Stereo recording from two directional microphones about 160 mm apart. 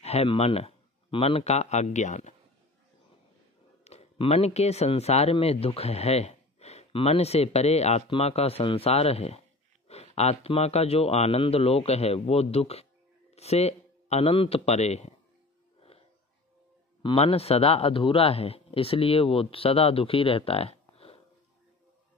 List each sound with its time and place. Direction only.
0.0 s a man's voice: 40° left (ahead or behind)
3.8 s a man's voice: 40° left (ahead or behind)
17.0 s speech: 35° left (ahead or behind)